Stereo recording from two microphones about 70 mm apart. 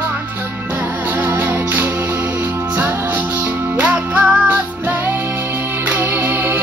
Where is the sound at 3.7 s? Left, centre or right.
Right.